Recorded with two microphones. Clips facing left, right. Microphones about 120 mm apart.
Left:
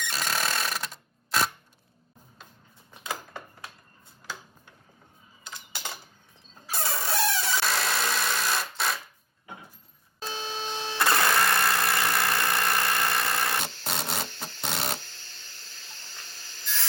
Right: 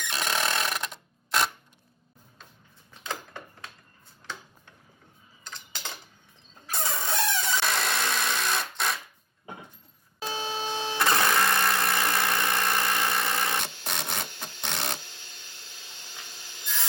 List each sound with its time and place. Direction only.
0.0 s sewing machine: 5° left (ahead or behind)
2.9 s a sound: 5° left (ahead or behind)
5.5 s cutlery: 10° left (ahead or behind)
6.7 s engine: 5° left (ahead or behind)
10.4 s printer: 15° right (ahead or behind)
11.0 s engine: centre (ahead or behind)
12.3 s a sound: centre (ahead or behind)
12.6 s rub: 5° right (ahead or behind)
14.6 s printer: 5° left (ahead or behind)
15.0 s wood: 15° right (ahead or behind)